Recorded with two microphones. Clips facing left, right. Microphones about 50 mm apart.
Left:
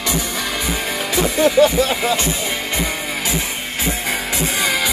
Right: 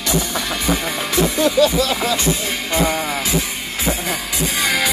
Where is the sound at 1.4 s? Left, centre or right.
Left.